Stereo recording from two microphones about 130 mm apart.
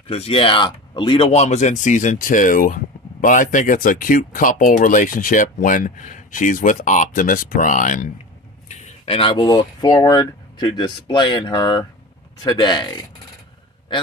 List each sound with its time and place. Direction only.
0.1 s speech: 45° left (ahead or behind)
1.3 s speech: 60° left (ahead or behind); by 8.1 s 80° left
9.0 s speech: 45° left (ahead or behind)